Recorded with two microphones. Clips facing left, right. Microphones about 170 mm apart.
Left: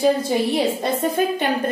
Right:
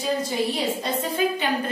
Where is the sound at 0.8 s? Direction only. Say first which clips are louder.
Left 4 dB; 50° left (ahead or behind).